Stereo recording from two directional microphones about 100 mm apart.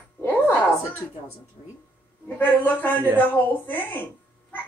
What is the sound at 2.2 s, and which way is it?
A man's voice, 20° left (ahead or behind).